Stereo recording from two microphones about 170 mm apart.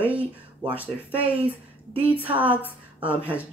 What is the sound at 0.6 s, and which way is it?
Speech, 10° right (ahead or behind).